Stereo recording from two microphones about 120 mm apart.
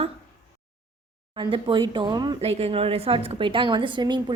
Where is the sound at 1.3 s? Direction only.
45° right (ahead or behind).